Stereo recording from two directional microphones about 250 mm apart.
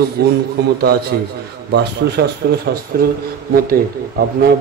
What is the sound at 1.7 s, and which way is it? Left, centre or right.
A man's voice, right.